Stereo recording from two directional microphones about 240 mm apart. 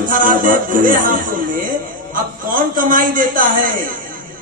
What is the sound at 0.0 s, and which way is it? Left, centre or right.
A man's voice, right.